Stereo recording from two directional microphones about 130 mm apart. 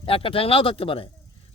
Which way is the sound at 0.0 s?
45° left (ahead or behind).